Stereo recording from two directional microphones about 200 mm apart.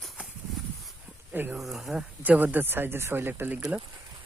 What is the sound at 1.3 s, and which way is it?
Speech, 10° right (ahead or behind).